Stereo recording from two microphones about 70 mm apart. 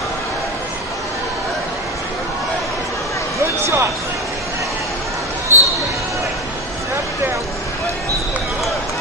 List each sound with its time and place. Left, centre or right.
3.6 s speech: right
5.5 s basketball bounce: right